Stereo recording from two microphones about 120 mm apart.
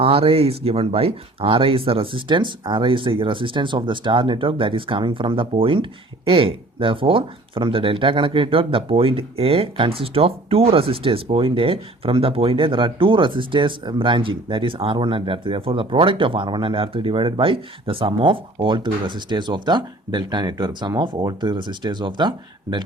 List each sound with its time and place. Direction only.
0.0 s speech: 55° right (ahead or behind)